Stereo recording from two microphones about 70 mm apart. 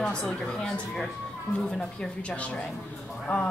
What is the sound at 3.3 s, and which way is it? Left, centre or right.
Speech, left.